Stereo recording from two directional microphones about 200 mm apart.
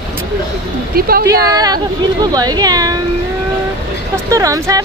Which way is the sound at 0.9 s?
50° right (ahead or behind).